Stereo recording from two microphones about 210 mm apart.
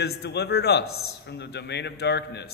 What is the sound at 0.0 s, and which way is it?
Speech, 50° left (ahead or behind).